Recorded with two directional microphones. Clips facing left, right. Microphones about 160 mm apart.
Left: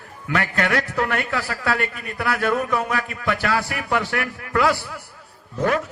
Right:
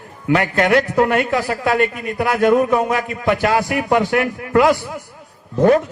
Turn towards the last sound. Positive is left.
turn(degrees=-30)  # may be behind; listen again after turning